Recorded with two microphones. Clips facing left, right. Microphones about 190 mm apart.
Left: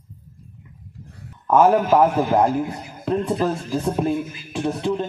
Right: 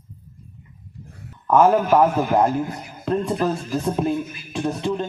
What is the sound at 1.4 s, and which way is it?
A man's voice, 5° left (ahead or behind).